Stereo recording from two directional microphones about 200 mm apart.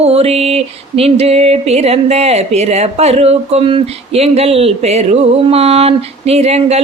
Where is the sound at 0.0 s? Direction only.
30° right (ahead or behind).